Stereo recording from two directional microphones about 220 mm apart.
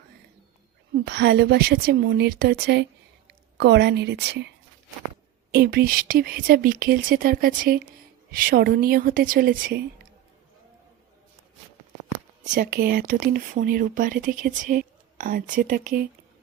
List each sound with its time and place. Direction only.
0.9 s speech: 50° right (ahead or behind)
12.5 s speech: 40° right (ahead or behind)